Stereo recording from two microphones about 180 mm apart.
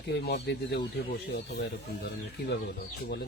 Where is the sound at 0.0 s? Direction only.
70° left (ahead or behind).